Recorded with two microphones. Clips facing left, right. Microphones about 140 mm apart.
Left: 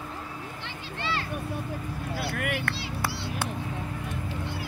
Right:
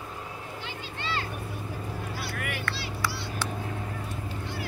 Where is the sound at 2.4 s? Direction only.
55° left (ahead or behind).